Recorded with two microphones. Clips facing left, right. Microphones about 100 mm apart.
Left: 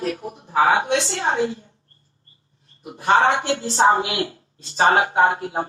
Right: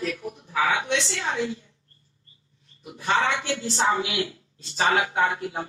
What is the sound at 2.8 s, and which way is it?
Speech, 40° left (ahead or behind).